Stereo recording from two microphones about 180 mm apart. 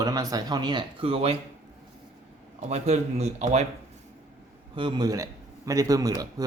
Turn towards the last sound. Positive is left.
turn(degrees=-20)  # may be behind; listen again after turning